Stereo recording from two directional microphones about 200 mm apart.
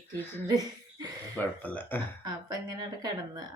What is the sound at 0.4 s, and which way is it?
Speech, 20° right (ahead or behind).